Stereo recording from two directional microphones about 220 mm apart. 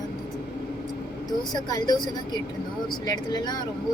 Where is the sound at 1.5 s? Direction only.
15° left (ahead or behind).